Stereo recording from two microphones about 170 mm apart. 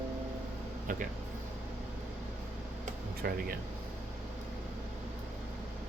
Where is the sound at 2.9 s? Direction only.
60° right (ahead or behind).